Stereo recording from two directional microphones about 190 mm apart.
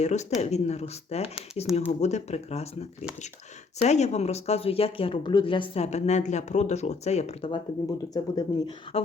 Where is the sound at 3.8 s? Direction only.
35° left (ahead or behind).